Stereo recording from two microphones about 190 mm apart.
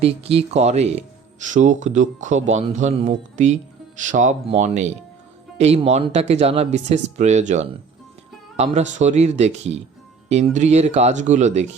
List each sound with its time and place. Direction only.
0.0 s speech: 30° right (ahead or behind)